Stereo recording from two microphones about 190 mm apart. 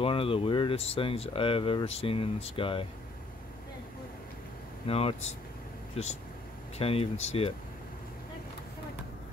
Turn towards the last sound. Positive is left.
turn(degrees=35)  # may be behind; listen again after turning